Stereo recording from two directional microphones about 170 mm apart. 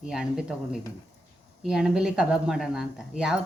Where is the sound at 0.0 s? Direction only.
5° right (ahead or behind).